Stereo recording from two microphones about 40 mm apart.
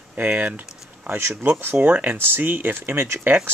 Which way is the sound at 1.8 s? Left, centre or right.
Right.